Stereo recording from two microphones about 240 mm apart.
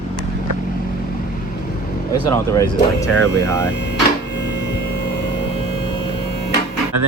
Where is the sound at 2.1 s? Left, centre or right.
Centre.